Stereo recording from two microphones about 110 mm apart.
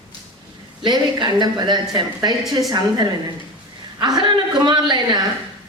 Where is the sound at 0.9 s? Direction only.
40° right (ahead or behind).